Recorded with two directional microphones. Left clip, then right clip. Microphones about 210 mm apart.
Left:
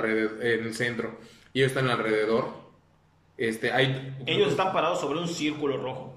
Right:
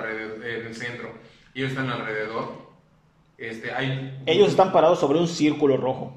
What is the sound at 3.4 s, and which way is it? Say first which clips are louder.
Speech: left 4 dB; 55° left (ahead or behind).